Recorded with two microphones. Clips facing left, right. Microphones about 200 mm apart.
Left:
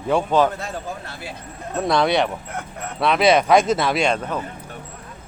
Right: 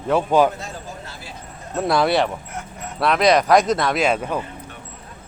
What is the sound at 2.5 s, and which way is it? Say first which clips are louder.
Speech: left 2 dB; 60° left (ahead or behind).